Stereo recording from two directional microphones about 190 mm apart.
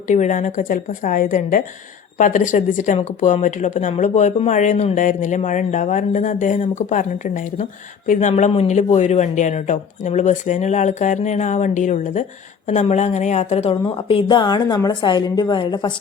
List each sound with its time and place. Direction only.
0.1 s a woman's voice: 40° left (ahead or behind); by 15.9 s 25° left (ahead or behind)